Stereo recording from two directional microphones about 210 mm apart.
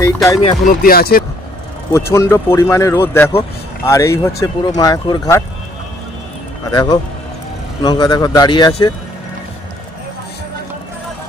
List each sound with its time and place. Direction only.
0.0 s speech: 15° left (ahead or behind)
0.4 s speech: 30° left (ahead or behind)
0.8 s speech: 45° left (ahead or behind)
1.9 s speech: 15° left (ahead or behind)
6.7 s speech: 20° left (ahead or behind)